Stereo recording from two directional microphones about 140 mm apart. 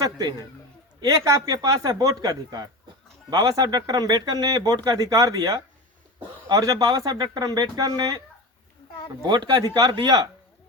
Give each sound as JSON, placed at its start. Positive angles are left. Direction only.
{"t": 0.0, "sound": "a man's voice", "side_deg": -25}
{"t": 9.2, "sound": "speech", "side_deg": -30}